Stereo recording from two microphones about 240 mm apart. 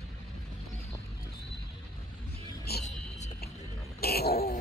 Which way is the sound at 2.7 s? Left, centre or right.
Left.